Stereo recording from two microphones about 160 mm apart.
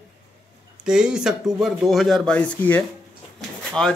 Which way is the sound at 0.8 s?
5° right (ahead or behind).